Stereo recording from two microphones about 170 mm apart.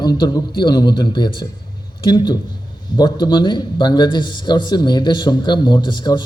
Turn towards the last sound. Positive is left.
turn(degrees=25)  # may be behind; listen again after turning